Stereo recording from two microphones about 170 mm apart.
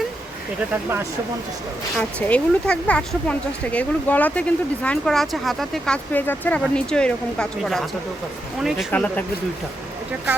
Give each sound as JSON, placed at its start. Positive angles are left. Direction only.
{"t": 2.0, "sound": "speech", "side_deg": 10}
{"t": 8.9, "sound": "speech", "side_deg": 10}